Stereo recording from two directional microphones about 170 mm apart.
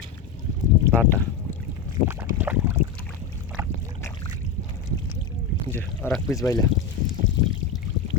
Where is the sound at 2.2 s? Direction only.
10° right (ahead or behind).